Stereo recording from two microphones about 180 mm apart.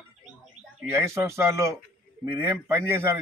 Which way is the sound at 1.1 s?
15° right (ahead or behind).